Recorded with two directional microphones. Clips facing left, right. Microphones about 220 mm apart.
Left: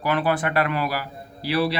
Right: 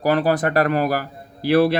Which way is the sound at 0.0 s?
40° right (ahead or behind).